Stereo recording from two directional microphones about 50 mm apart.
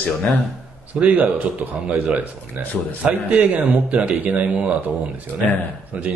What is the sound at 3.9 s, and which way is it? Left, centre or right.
Speech, right.